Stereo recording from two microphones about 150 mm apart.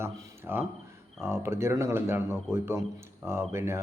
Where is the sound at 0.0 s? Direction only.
15° right (ahead or behind).